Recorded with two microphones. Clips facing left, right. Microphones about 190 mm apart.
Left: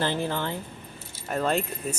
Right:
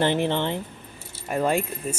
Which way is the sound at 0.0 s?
25° right (ahead or behind).